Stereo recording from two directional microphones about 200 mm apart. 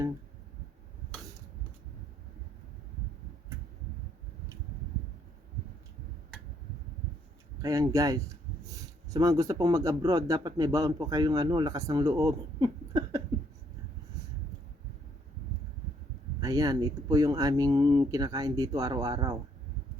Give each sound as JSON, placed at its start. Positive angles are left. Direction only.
{"t": 7.6, "sound": "speech", "side_deg": -15}
{"t": 16.4, "sound": "speech", "side_deg": -20}